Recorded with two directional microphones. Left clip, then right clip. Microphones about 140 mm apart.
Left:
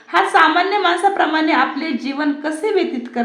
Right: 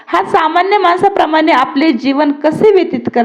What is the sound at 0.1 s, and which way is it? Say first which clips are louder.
A woman's voice: right 2 dB; 50° right (ahead or behind).